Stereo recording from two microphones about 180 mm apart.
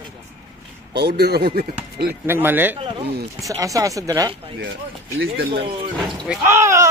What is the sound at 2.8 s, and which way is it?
Speech, 30° right (ahead or behind).